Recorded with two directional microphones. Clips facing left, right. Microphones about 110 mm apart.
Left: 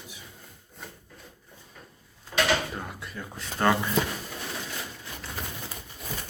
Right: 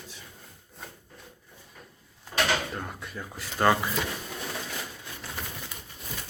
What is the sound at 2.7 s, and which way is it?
Speech, centre (ahead or behind).